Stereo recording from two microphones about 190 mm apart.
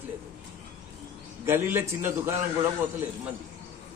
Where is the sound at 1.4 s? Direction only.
10° right (ahead or behind).